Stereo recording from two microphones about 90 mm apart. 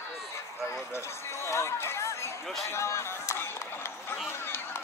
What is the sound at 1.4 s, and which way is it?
Speech, 30° left (ahead or behind).